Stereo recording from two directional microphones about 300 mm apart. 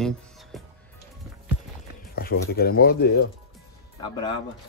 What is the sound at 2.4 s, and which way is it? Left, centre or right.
Speech, left.